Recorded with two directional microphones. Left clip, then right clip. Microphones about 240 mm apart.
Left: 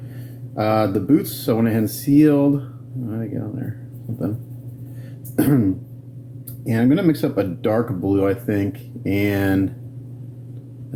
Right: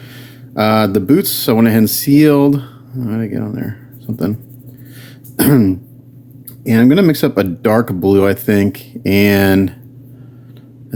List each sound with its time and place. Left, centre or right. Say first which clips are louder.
0.5 s speech: right 6 dB; right
5.4 s speech: right 6 dB; right
6.7 s speech: right 7 dB; right